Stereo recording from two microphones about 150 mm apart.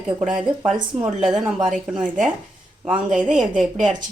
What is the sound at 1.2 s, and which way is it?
Speech, 5° right (ahead or behind).